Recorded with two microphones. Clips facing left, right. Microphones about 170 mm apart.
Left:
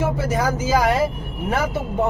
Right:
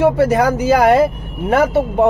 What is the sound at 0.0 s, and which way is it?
A man's voice, 65° right (ahead or behind).